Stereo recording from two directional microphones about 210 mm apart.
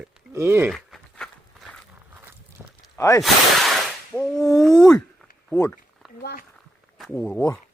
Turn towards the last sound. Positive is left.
turn(degrees=5)  # may be behind; listen again after turning